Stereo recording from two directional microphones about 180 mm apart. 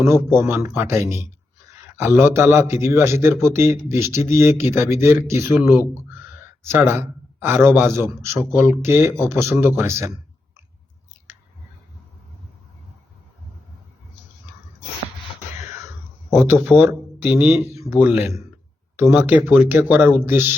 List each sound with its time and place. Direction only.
0.0 s speech: 15° right (ahead or behind)
6.6 s a man's voice: 10° right (ahead or behind)
16.3 s speech: 10° right (ahead or behind)